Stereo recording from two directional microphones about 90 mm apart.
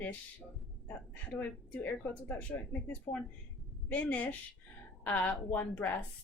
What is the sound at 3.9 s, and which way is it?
A woman's voice, 15° left (ahead or behind).